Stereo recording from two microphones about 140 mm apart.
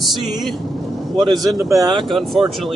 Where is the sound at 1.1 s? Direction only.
Centre (ahead or behind).